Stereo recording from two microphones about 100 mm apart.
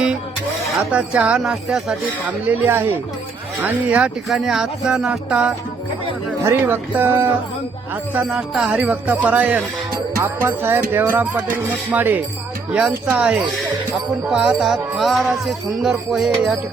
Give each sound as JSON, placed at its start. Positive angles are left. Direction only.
{"t": 0.9, "sound": "speech", "side_deg": -10}
{"t": 6.4, "sound": "music", "side_deg": -25}
{"t": 8.1, "sound": "speech", "side_deg": -10}
{"t": 10.2, "sound": "music", "side_deg": -25}
{"t": 11.7, "sound": "speech", "side_deg": -15}